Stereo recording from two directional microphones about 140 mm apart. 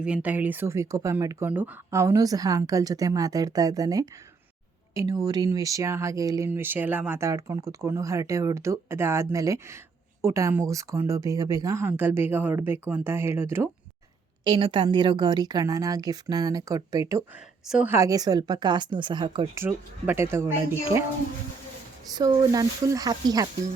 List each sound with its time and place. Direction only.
0.0 s speech: 10° right (ahead or behind)
1.5 s speech: 15° right (ahead or behind)
14.4 s speech: 35° right (ahead or behind)
17.7 s speech: 5° right (ahead or behind)
17.9 s speech: 25° right (ahead or behind)
19.5 s speech: 15° right (ahead or behind)
22.1 s speech: 30° right (ahead or behind)